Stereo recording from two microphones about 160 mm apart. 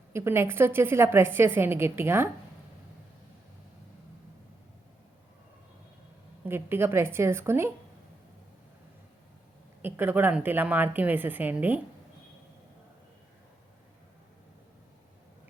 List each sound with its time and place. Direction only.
0.1 s a woman's voice: 15° right (ahead or behind)
6.4 s a woman's voice: 15° right (ahead or behind)
9.8 s a woman's voice: 15° right (ahead or behind)